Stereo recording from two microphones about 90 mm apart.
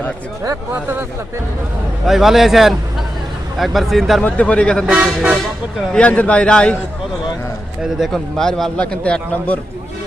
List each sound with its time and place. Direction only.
0.7 s speech: 25° right (ahead or behind)
2.0 s a man's voice: 5° right (ahead or behind)
4.2 s a man's voice: 15° left (ahead or behind)
4.9 s speech: 10° right (ahead or behind)
5.8 s a man's voice: 10° left (ahead or behind)
7.9 s a man's voice: centre (ahead or behind)